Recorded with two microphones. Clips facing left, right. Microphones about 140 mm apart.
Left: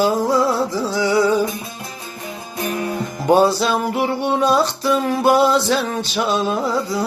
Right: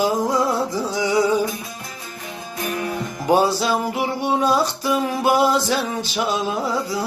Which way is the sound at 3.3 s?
10° right (ahead or behind).